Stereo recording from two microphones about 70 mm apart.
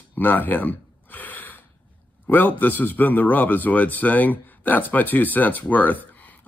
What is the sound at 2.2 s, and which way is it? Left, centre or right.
Speech, left.